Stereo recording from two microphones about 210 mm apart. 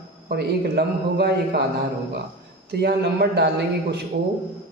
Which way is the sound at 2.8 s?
50° right (ahead or behind).